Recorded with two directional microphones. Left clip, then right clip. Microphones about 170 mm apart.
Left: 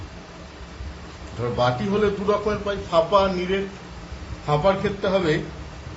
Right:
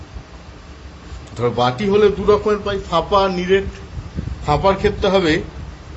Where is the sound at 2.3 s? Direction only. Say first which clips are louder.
Right 7 dB; 55° right (ahead or behind).